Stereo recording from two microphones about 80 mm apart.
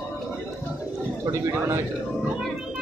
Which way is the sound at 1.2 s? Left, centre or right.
Right.